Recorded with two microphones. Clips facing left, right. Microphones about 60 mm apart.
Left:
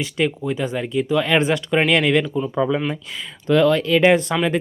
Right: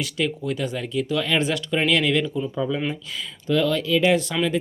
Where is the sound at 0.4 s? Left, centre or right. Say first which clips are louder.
Left 3 dB; left.